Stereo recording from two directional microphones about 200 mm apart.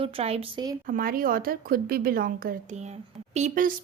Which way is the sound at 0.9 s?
45° right (ahead or behind).